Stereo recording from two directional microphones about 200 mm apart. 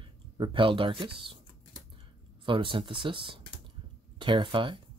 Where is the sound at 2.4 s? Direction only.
25° right (ahead or behind).